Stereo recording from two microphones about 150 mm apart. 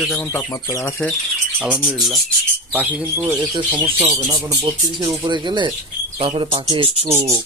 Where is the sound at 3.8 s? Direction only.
40° right (ahead or behind).